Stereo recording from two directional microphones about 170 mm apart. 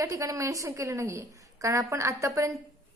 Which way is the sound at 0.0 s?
20° right (ahead or behind).